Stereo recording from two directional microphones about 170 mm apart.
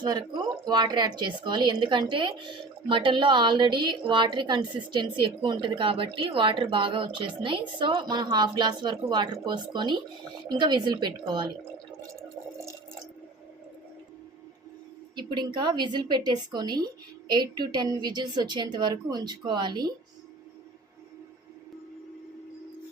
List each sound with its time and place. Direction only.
0.0 s a woman's voice: 25° right (ahead or behind)
15.1 s a woman's voice: 25° right (ahead or behind)